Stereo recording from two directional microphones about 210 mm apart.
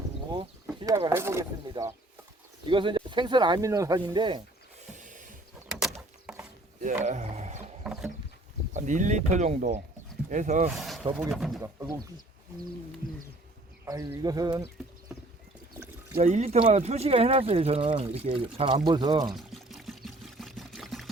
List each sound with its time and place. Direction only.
0.3 s speech: 20° right (ahead or behind)
2.6 s speech: 25° right (ahead or behind)
4.9 s a sound: 35° right (ahead or behind)
6.8 s speech: 35° right (ahead or behind)
8.7 s speech: 35° right (ahead or behind)
10.8 s a sound: centre (ahead or behind)
11.3 s speech: centre (ahead or behind)
11.6 s speech: 15° right (ahead or behind)
13.8 s speech: 15° right (ahead or behind)
16.2 s speech: 30° right (ahead or behind)
19.2 s pour: centre (ahead or behind)